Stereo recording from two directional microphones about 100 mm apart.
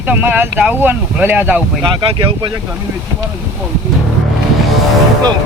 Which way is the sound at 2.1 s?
60° right (ahead or behind).